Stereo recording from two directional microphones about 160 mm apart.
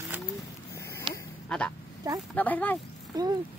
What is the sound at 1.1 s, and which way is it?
Duck, 30° right (ahead or behind).